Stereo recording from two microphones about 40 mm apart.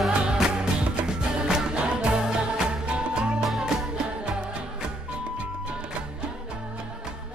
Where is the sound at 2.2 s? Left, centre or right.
Centre.